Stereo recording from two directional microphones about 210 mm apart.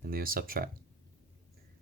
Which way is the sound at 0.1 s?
45° right (ahead or behind).